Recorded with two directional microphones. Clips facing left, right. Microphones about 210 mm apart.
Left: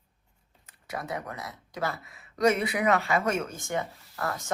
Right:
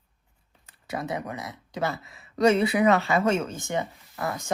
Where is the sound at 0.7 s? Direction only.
25° right (ahead or behind).